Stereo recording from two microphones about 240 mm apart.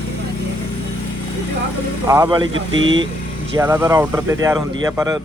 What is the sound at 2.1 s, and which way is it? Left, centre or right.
Speech, centre.